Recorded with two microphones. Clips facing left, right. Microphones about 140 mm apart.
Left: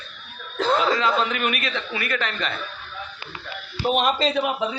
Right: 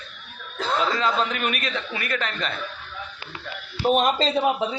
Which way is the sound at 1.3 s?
40° right (ahead or behind).